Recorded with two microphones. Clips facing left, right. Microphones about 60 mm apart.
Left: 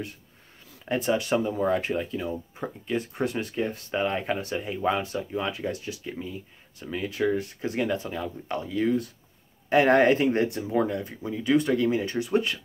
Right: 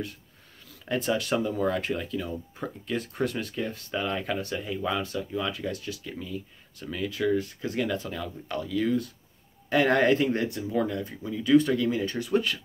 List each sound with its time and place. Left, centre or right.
0.8 s speech: left